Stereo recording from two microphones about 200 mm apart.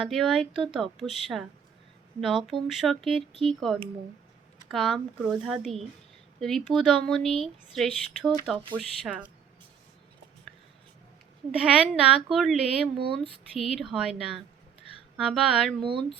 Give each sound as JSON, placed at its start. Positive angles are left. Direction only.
{"t": 0.0, "sound": "speech", "side_deg": 0}
{"t": 11.5, "sound": "speech", "side_deg": -5}
{"t": 15.8, "sound": "speech", "side_deg": -25}